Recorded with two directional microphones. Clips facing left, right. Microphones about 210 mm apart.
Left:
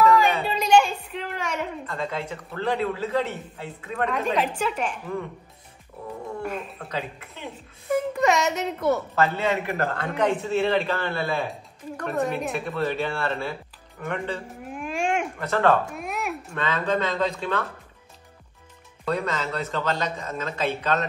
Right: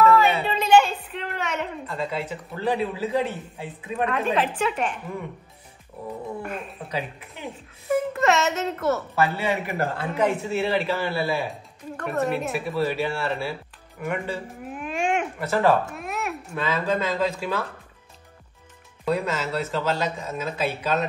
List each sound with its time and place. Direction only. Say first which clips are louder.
0.0 s a sound: right 1 dB; 5° right (ahead or behind)
2.0 s a man's voice: right 2 dB; 10° right (ahead or behind)
6.4 s a man's voice: left 2 dB; 5° right (ahead or behind)
19.0 s a man's voice: right 2 dB; 10° right (ahead or behind)